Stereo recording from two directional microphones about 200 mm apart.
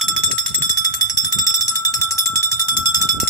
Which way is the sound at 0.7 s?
15° left (ahead or behind).